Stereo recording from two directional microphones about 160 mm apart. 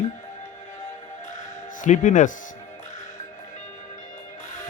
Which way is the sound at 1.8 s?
50° left (ahead or behind).